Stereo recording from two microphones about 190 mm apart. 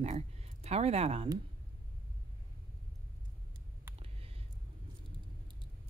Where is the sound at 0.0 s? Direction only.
35° right (ahead or behind).